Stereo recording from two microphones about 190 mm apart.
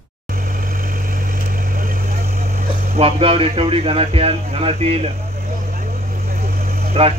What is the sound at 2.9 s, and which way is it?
Speech, 30° right (ahead or behind).